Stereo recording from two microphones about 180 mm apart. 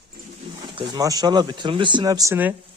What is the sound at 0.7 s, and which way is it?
Speech, 25° right (ahead or behind).